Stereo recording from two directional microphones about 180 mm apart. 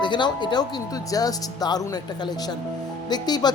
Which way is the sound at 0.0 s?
25° left (ahead or behind).